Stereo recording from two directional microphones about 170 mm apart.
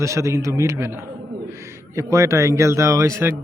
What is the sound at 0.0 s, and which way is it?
Speech, 15° right (ahead or behind).